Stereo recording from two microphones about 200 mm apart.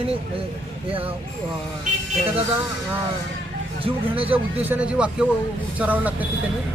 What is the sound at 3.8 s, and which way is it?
Speech, 30° right (ahead or behind).